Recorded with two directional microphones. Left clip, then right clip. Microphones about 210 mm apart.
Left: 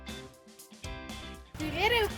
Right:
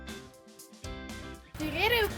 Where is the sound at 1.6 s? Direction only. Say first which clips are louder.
Even; 15° left (ahead or behind).